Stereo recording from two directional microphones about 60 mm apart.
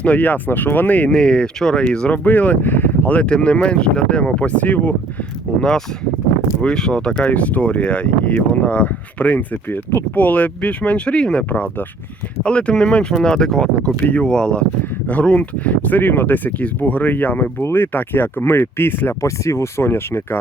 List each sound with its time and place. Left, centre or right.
0.0 s speech: left
1.1 s speech: centre
3.2 s speech: centre
5.5 s speech: centre; by 17.5 s left
17.6 s speech: left
19.2 s speech: left